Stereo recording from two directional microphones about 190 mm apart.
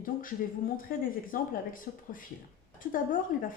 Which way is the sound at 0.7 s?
50° left (ahead or behind).